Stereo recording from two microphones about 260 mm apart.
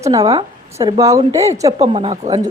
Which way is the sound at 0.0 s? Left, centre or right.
Centre.